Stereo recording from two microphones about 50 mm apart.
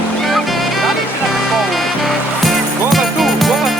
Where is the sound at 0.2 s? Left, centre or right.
Centre.